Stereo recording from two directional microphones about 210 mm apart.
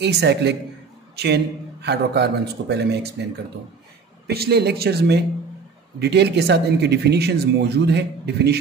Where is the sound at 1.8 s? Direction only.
50° right (ahead or behind).